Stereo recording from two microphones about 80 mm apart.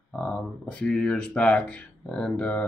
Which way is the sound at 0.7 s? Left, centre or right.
Centre.